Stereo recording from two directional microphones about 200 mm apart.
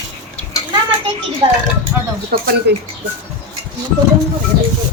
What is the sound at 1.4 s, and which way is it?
Speech, 25° right (ahead or behind).